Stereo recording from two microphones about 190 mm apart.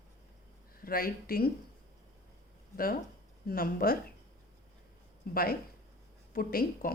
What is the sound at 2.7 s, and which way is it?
Speech, 50° left (ahead or behind).